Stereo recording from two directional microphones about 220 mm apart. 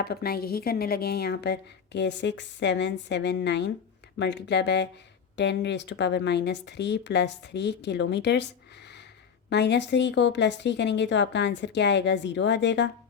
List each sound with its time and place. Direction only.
0.0 s speech: 45° left (ahead or behind)
9.5 s speech: 50° left (ahead or behind)